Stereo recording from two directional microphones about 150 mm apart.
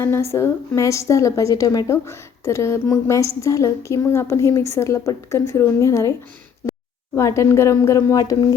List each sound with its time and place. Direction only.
0.0 s a woman's voice: 20° left (ahead or behind)
7.2 s a woman's voice: 20° left (ahead or behind)